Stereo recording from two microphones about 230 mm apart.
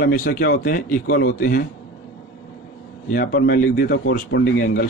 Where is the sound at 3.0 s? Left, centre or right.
Left.